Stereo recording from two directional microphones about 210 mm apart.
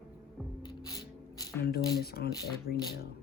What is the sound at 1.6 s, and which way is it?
Speech, 50° left (ahead or behind).